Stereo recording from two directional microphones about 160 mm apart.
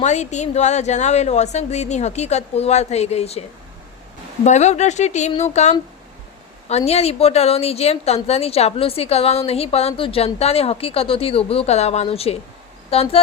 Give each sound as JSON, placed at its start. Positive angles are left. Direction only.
{"t": 0.0, "sound": "a woman's voice", "side_deg": 45}
{"t": 4.4, "sound": "a woman's voice", "side_deg": 45}